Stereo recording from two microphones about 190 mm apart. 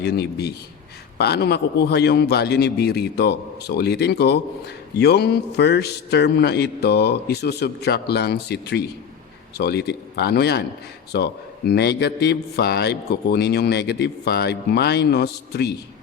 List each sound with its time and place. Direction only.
0.0 s a man's voice: 60° left (ahead or behind)